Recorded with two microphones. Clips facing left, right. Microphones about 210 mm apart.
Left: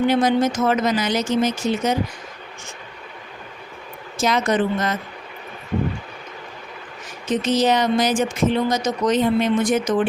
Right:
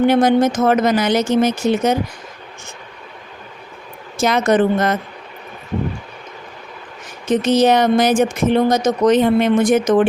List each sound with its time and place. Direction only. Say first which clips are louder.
0.0 s speech: right 4 dB; 55° right (ahead or behind)
4.2 s speech: right 5 dB; 55° right (ahead or behind)
7.3 s speech: right 5 dB; 60° right (ahead or behind)